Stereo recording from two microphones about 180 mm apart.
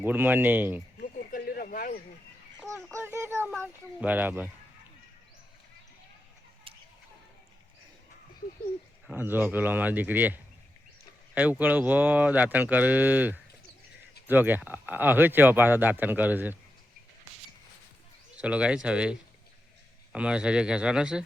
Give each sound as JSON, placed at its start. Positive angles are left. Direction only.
{"t": 0.0, "sound": "speech", "side_deg": -10}
{"t": 1.0, "sound": "a sound", "side_deg": 55}
{"t": 2.6, "sound": "speech", "side_deg": -15}
{"t": 9.1, "sound": "speech", "side_deg": -10}
{"t": 18.3, "sound": "speech", "side_deg": -5}
{"t": 20.1, "sound": "speech", "side_deg": -5}